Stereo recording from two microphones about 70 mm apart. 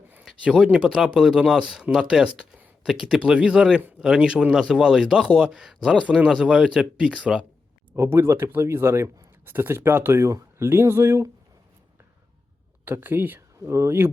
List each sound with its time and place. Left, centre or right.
0.4 s speech: centre
3.2 s speech: centre
7.9 s speech: right
12.8 s speech: right